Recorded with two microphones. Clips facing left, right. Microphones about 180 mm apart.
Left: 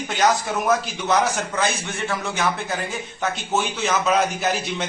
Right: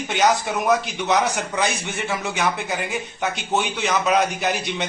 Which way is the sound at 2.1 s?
20° right (ahead or behind).